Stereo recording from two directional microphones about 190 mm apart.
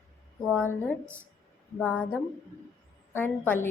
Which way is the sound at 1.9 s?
10° left (ahead or behind).